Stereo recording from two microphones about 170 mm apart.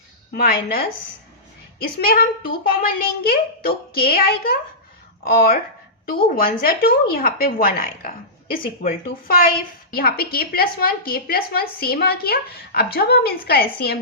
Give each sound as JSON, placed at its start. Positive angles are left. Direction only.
{"t": 0.3, "sound": "a woman's voice", "side_deg": 60}
{"t": 2.0, "sound": "a woman's voice", "side_deg": 60}